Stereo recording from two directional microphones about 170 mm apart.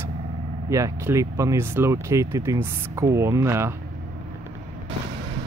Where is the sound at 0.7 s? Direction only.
20° right (ahead or behind).